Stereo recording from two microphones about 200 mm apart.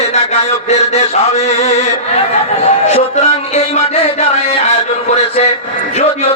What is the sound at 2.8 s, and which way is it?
Music, 35° left (ahead or behind).